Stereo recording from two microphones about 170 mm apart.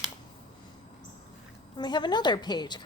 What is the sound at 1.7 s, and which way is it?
A woman's voice, 25° left (ahead or behind).